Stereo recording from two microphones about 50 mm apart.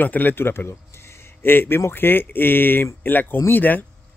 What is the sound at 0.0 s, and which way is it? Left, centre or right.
Speech, left.